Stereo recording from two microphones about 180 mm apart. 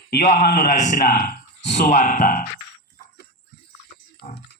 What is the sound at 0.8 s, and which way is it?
Speech, 45° left (ahead or behind).